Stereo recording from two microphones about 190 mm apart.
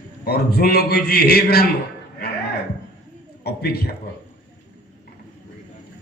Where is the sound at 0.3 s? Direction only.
55° left (ahead or behind).